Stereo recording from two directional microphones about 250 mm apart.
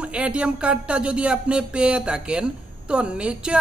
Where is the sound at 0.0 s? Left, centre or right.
Centre.